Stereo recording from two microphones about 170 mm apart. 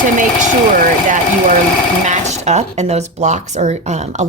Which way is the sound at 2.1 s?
40° right (ahead or behind).